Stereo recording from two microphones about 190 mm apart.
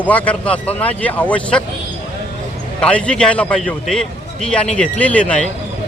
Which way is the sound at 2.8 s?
5° left (ahead or behind).